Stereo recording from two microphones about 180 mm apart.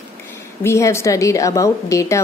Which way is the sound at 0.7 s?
15° left (ahead or behind).